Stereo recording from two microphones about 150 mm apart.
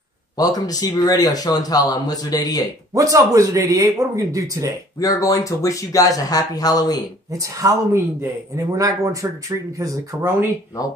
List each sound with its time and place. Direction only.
0.4 s a man's voice: 25° left (ahead or behind)
2.9 s speech: 20° right (ahead or behind)
5.0 s a man's voice: 25° left (ahead or behind)
7.3 s speech: 20° right (ahead or behind)